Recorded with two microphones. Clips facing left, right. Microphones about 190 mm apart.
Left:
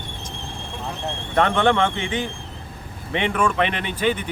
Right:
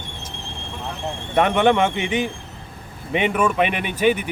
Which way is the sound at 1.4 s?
15° right (ahead or behind).